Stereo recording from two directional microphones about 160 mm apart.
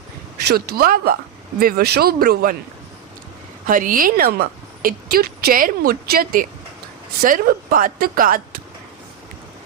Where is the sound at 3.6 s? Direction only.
60° right (ahead or behind).